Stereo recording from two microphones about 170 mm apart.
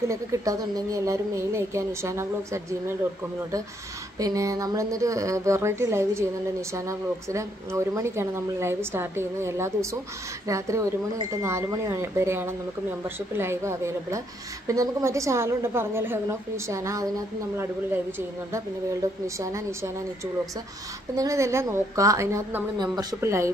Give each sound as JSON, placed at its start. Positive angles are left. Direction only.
{"t": 0.1, "sound": "a woman's voice", "side_deg": -20}
{"t": 4.2, "sound": "a woman's voice", "side_deg": -20}
{"t": 19.2, "sound": "a woman's voice", "side_deg": -15}
{"t": 21.2, "sound": "a woman's voice", "side_deg": -20}